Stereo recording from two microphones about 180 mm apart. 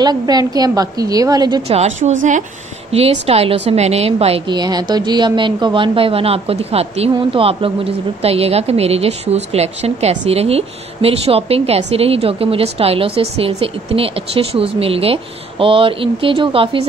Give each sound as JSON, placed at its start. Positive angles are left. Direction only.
{"t": 0.0, "sound": "a woman's voice", "side_deg": -20}
{"t": 2.0, "sound": "a woman's voice", "side_deg": -35}